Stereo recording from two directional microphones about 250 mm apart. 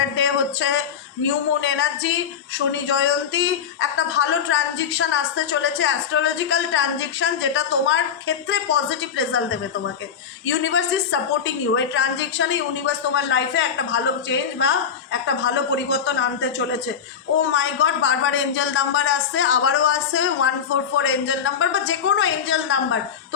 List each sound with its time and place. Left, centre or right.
0.2 s a sound: left
1.6 s a woman's voice: left
10.7 s a woman's voice: left